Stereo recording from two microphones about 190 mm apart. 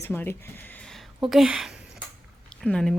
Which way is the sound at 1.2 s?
5° right (ahead or behind).